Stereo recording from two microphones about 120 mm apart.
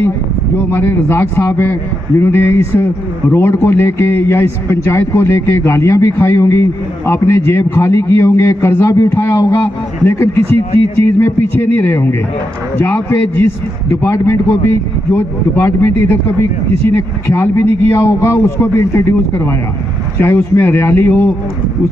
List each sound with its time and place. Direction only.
0.7 s a man's voice: 20° left (ahead or behind)